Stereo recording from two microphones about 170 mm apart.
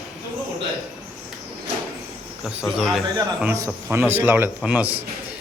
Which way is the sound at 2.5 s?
Centre (ahead or behind).